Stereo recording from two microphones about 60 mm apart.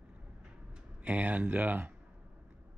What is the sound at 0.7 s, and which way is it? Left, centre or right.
Speech, right.